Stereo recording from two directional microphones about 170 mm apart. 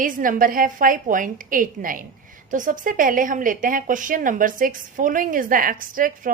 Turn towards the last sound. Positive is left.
turn(degrees=-55)  # may be behind; listen again after turning